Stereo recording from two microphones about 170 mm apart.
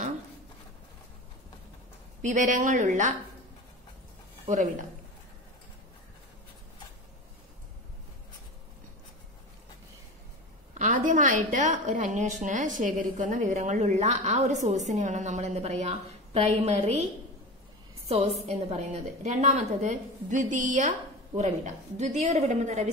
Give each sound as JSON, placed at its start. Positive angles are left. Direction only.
{"t": 2.2, "sound": "a woman's voice", "side_deg": -50}
{"t": 4.5, "sound": "a woman's voice", "side_deg": -45}
{"t": 10.7, "sound": "a woman's voice", "side_deg": -45}
{"t": 18.0, "sound": "a woman's voice", "side_deg": -35}